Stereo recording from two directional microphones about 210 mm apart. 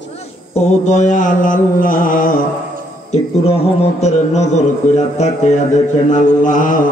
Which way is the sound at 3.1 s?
30° left (ahead or behind).